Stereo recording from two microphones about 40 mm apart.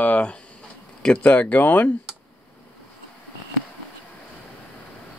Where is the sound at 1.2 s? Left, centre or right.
Left.